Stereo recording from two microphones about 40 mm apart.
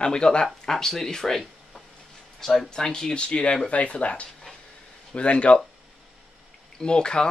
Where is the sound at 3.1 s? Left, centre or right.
Left.